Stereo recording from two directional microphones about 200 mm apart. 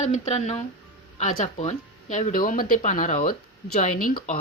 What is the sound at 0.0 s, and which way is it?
Speech, 35° left (ahead or behind).